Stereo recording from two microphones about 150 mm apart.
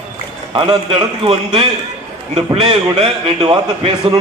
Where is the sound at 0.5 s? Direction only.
35° right (ahead or behind).